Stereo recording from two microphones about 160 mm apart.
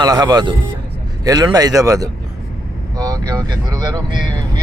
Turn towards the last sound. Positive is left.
turn(degrees=-25)  # may be behind; listen again after turning